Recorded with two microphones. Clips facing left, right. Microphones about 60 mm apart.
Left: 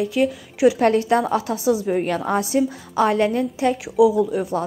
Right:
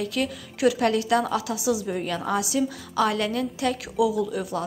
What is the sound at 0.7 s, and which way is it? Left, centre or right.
A woman's voice, left.